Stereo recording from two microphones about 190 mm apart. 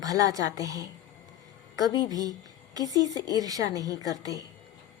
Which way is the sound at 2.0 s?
20° right (ahead or behind).